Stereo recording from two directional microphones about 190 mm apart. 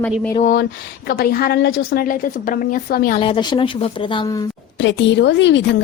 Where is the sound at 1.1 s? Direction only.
55° left (ahead or behind).